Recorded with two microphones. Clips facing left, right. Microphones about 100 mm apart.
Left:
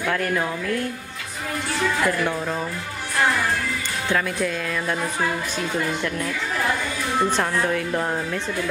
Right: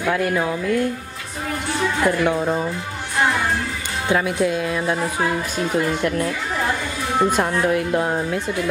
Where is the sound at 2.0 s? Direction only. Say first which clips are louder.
Right 5 dB; 20° right (ahead or behind).